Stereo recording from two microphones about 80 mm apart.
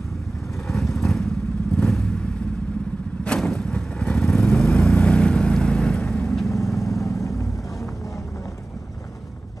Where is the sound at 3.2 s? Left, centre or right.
Centre.